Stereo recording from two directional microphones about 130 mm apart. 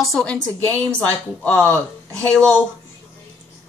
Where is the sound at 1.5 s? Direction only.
20° right (ahead or behind).